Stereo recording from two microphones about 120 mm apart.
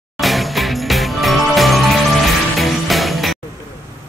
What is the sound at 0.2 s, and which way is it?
Music, centre (ahead or behind).